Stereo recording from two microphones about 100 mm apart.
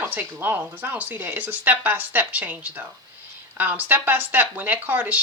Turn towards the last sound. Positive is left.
turn(degrees=-20)  # may be behind; listen again after turning